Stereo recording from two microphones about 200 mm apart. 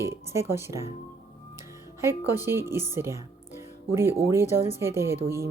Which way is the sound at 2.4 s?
10° right (ahead or behind).